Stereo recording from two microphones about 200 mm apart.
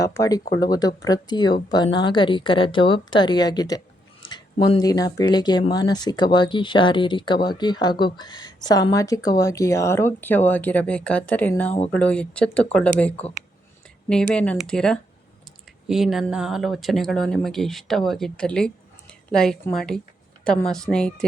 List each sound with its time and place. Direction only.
0.0 s speech: 15° left (ahead or behind)